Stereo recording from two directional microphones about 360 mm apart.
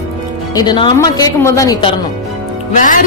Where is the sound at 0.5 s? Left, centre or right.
Centre.